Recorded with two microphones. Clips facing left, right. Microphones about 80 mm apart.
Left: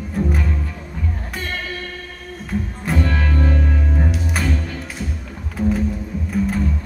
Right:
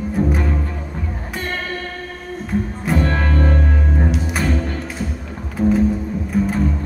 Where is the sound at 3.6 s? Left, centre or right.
Centre.